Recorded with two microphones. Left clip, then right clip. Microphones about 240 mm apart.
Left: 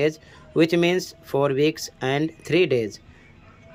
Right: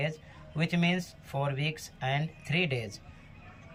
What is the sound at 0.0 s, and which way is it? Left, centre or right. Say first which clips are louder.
Speech: left 12 dB; left.